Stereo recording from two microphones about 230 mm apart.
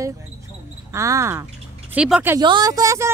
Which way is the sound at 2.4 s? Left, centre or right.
Centre.